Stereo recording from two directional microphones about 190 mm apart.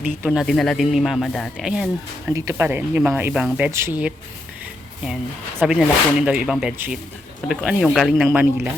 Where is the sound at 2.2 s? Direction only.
15° right (ahead or behind).